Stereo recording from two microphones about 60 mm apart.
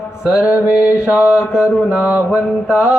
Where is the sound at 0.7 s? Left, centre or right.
Left.